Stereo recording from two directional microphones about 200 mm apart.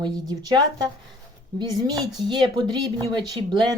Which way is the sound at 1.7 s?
20° right (ahead or behind).